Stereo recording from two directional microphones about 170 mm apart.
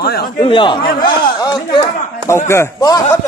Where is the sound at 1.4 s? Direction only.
25° left (ahead or behind).